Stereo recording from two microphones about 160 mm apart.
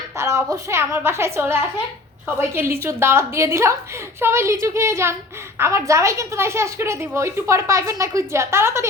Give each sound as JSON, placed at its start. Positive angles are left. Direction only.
{"t": 0.2, "sound": "a woman's voice", "side_deg": -20}